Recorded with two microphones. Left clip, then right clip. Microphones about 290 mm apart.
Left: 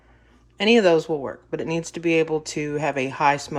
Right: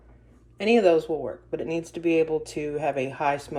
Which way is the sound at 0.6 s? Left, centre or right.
Centre.